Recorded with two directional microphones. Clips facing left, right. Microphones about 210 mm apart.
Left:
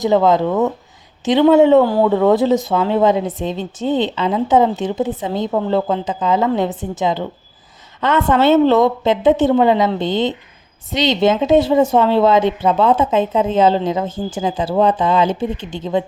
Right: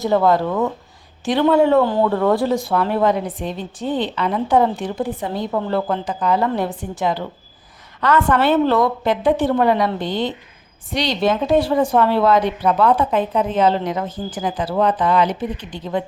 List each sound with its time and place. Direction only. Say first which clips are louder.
0.0 s speech: left 3 dB; 20° left (ahead or behind)
1.8 s speech: left 3 dB; 10° left (ahead or behind)